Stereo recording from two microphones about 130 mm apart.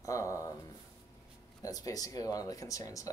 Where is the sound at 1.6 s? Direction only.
25° left (ahead or behind).